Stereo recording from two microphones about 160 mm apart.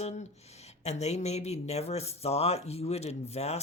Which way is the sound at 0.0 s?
45° left (ahead or behind).